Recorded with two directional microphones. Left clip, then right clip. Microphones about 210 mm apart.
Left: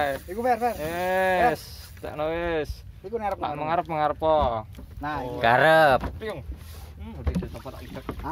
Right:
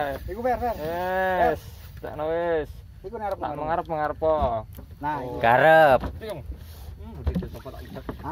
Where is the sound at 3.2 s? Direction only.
20° left (ahead or behind).